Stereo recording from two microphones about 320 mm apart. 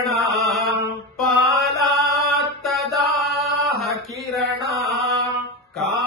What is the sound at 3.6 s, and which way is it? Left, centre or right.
Mantra, centre.